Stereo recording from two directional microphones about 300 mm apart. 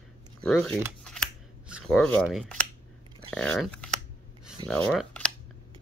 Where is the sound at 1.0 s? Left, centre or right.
Centre.